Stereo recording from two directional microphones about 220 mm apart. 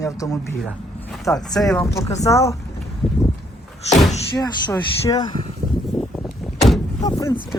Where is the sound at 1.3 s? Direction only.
Centre (ahead or behind).